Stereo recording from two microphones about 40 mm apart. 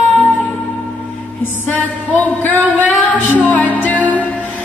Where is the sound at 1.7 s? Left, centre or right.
Left.